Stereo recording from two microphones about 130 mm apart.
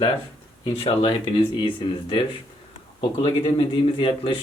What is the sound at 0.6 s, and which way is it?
Speech, 40° left (ahead or behind).